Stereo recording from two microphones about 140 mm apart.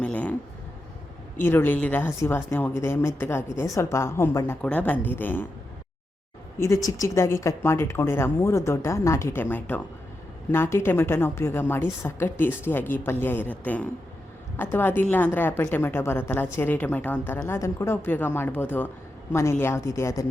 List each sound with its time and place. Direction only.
0.0 s a sound: 10° left (ahead or behind)
1.4 s a woman's voice: 15° left (ahead or behind)
6.6 s a woman's voice: 20° left (ahead or behind)